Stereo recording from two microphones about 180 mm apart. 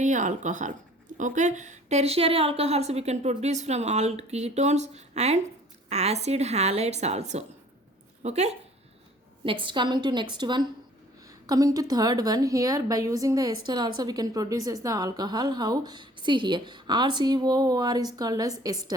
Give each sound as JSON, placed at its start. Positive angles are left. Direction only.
{"t": 0.0, "sound": "a woman's voice", "side_deg": -45}
{"t": 9.4, "sound": "a woman's voice", "side_deg": -30}